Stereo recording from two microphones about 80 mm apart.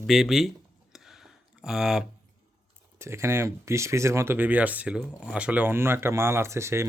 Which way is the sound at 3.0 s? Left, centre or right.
Right.